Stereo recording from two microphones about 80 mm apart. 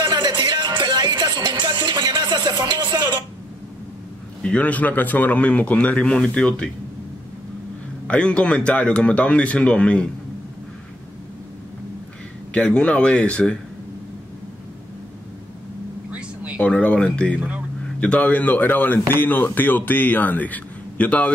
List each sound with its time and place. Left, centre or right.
0.0 s music: right
4.4 s speech: centre
8.1 s speech: centre
12.5 s speech: centre
16.1 s a sound: centre
16.6 s speech: centre
17.4 s speech: centre
18.0 s speech: centre